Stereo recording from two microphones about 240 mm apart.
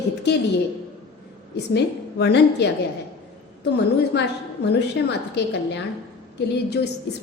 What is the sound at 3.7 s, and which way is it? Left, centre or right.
A woman's voice, left.